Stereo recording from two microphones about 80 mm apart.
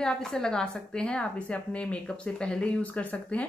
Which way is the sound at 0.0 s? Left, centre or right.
Centre.